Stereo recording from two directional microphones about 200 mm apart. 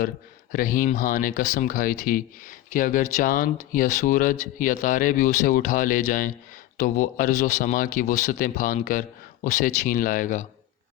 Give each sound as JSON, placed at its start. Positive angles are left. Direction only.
{"t": 0.5, "sound": "speech", "side_deg": 45}